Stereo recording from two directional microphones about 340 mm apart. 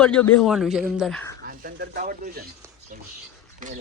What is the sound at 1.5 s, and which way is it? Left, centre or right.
Speech, right.